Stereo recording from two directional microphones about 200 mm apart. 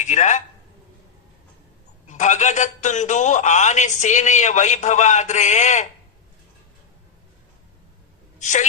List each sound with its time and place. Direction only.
0.0 s a man's voice: 35° left (ahead or behind)
2.0 s a man's voice: 35° left (ahead or behind)
8.4 s a woman's voice: 35° left (ahead or behind)